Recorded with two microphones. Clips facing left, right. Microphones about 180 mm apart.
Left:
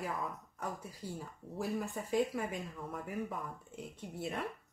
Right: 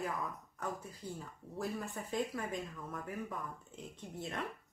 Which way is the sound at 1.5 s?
5° left (ahead or behind).